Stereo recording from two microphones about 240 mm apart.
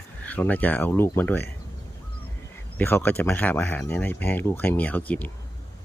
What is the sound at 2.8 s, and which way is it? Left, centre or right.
Speech, centre.